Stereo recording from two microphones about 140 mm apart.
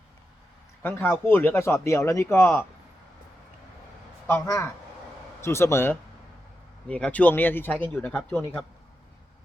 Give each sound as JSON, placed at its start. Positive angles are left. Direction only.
{"t": 0.8, "sound": "speech", "side_deg": 15}
{"t": 4.3, "sound": "speech", "side_deg": 20}